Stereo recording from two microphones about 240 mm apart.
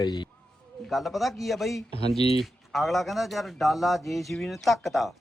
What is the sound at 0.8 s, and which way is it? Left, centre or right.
Speech, centre.